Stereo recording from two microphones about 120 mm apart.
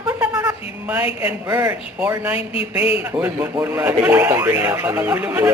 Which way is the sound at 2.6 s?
50° left (ahead or behind).